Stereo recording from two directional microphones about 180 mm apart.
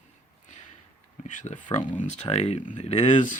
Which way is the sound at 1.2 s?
45° left (ahead or behind).